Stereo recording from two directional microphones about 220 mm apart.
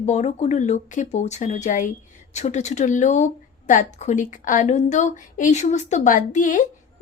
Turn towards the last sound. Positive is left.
turn(degrees=35)  # may be behind; listen again after turning